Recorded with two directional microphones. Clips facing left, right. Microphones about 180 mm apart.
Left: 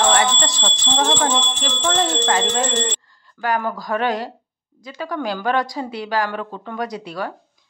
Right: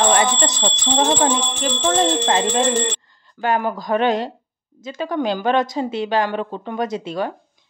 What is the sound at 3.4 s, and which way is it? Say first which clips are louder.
Speech: right 2 dB; 25° right (ahead or behind).